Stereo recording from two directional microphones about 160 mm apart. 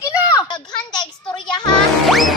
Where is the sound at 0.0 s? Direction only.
20° left (ahead or behind).